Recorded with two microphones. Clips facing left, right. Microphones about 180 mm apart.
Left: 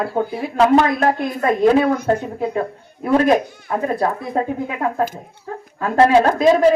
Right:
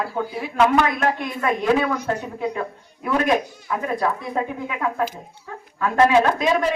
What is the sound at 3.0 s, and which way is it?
A man's voice, 35° left (ahead or behind).